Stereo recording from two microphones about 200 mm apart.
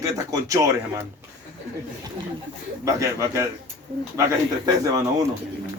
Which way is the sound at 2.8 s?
15° right (ahead or behind).